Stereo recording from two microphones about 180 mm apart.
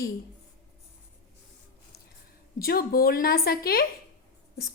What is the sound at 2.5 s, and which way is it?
A woman's voice, 55° left (ahead or behind).